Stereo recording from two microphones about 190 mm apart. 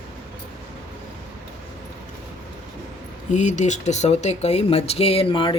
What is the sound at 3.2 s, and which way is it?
Speech, 40° left (ahead or behind).